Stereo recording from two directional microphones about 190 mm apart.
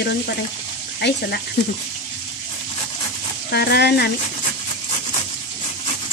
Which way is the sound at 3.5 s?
60° left (ahead or behind).